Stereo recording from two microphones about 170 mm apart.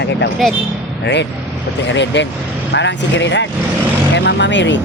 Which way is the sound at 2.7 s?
90° left.